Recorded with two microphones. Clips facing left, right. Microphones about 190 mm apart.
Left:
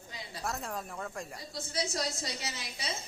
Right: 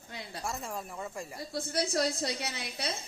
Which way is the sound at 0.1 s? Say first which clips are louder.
Right 3 dB; 60° right (ahead or behind).